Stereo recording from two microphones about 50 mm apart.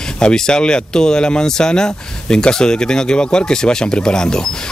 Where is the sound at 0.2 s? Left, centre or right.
Centre.